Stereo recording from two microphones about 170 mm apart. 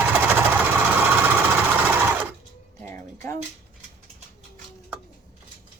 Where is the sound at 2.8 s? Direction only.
15° left (ahead or behind).